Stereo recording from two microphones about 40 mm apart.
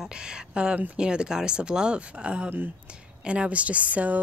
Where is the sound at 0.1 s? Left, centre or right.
Right.